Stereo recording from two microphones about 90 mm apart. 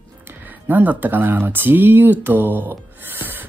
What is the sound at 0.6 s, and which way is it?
Speech, 20° right (ahead or behind).